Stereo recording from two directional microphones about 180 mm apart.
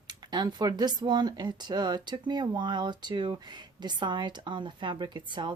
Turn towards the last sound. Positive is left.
turn(degrees=-25)  # may be behind; listen again after turning